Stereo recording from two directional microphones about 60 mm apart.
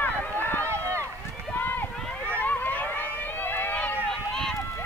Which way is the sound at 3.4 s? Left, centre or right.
Left.